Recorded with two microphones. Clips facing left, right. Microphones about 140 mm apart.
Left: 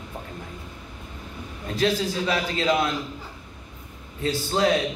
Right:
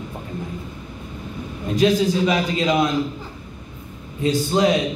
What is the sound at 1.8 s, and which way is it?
A man's voice, 15° right (ahead or behind).